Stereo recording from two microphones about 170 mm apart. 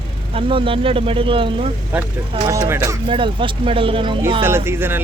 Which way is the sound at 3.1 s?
30° right (ahead or behind).